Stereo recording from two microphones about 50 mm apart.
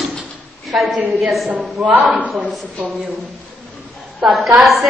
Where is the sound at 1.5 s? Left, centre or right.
Right.